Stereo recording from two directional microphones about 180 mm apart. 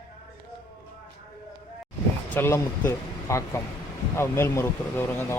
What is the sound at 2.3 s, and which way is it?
Speech, 15° left (ahead or behind).